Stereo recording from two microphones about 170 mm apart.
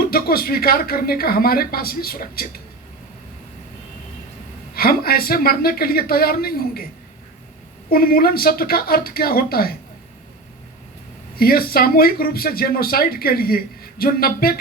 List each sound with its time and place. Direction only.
0.0 s speech: 60° left (ahead or behind)
4.7 s speech: 60° left (ahead or behind)
7.9 s speech: 60° left (ahead or behind)
11.3 s speech: 60° left (ahead or behind)